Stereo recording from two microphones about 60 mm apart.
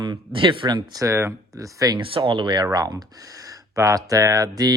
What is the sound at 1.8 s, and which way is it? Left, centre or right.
Speech, right.